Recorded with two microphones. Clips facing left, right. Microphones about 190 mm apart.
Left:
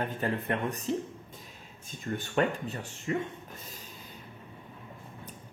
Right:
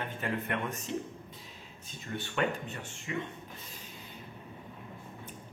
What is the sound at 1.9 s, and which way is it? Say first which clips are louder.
Speech: left 6 dB; 45° left (ahead or behind).